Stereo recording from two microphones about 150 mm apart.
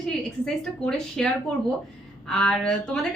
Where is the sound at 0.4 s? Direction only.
5° left (ahead or behind).